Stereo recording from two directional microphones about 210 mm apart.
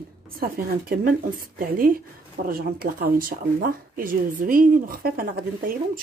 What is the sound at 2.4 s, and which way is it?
Speech, 45° right (ahead or behind).